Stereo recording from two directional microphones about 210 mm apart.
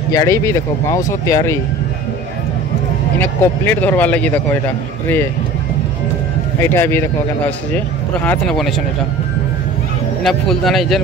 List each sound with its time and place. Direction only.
0.1 s a man's voice: 15° left (ahead or behind)
3.2 s a man's voice: 10° left (ahead or behind)
6.6 s a man's voice: 10° left (ahead or behind)
10.2 s speech: centre (ahead or behind)